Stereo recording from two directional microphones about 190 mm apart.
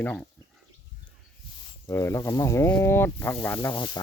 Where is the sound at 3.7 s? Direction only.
25° left (ahead or behind).